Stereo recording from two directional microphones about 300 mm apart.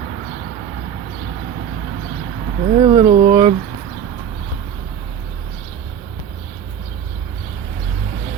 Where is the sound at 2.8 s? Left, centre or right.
Centre.